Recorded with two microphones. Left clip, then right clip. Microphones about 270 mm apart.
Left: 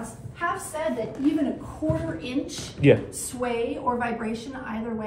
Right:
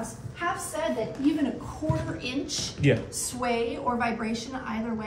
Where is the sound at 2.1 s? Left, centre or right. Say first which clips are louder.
Left 1 dB; centre.